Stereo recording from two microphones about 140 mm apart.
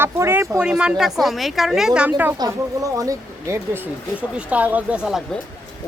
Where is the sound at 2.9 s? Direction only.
20° right (ahead or behind); by 5.2 s 5° right (ahead or behind).